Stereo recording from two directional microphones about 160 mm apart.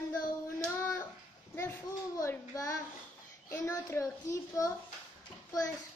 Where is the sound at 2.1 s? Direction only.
20° left (ahead or behind).